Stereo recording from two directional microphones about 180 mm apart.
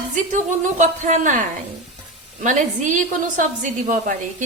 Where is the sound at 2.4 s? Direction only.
45° right (ahead or behind).